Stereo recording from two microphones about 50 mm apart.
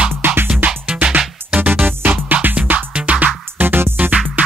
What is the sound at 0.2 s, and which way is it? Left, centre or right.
Music, right.